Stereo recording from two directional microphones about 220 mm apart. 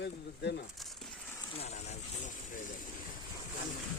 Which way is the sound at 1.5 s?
30° left (ahead or behind).